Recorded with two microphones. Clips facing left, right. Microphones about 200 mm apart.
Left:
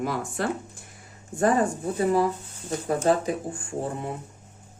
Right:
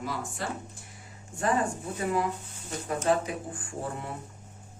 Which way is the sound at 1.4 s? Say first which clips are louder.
Left 6 dB; 40° left (ahead or behind).